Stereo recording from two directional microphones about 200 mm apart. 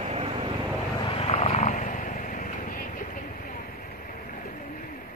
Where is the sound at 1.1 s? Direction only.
30° left (ahead or behind).